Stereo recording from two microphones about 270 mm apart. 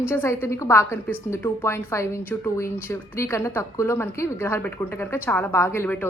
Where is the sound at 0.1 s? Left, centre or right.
Centre.